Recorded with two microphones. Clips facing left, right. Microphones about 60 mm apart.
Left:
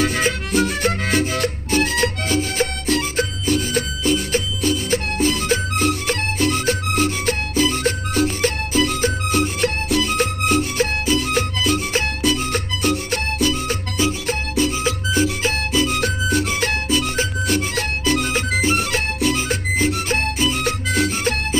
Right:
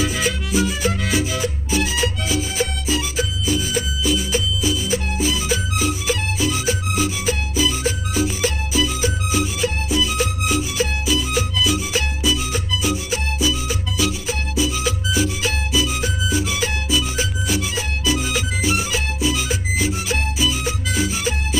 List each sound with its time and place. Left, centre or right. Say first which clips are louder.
0.0 s music: left 2 dB; left